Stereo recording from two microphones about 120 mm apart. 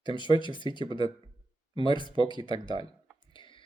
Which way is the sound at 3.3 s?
45° left (ahead or behind).